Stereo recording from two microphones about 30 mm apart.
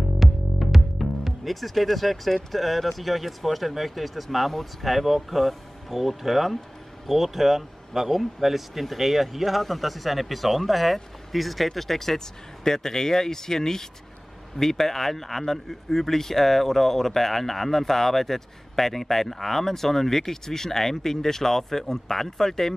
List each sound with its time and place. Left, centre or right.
0.2 s speech: centre